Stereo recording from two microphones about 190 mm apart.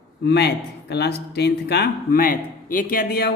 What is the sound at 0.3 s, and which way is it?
Speech, 60° left (ahead or behind).